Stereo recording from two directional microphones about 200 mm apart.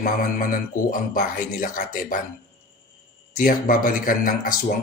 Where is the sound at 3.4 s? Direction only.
45° left (ahead or behind).